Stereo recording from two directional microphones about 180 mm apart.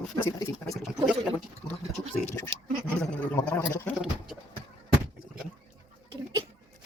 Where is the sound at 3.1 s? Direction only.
5° left (ahead or behind).